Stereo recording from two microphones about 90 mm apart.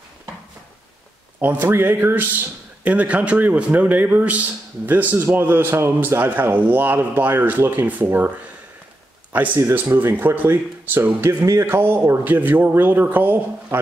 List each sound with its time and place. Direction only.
1.4 s speech: 25° right (ahead or behind)
9.6 s speech: 30° right (ahead or behind)
9.9 s speech: 20° right (ahead or behind)